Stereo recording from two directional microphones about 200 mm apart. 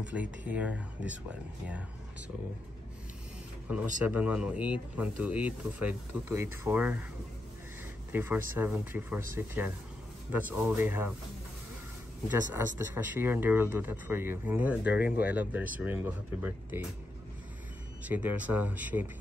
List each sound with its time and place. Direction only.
0.0 s speech: 5° right (ahead or behind)
4.0 s speech: 5° right (ahead or behind)
8.1 s speech: 10° right (ahead or behind)
12.3 s speech: 10° right (ahead or behind)
18.0 s speech: 10° right (ahead or behind)